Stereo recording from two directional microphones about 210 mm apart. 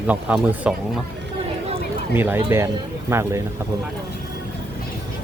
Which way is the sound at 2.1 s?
10° right (ahead or behind).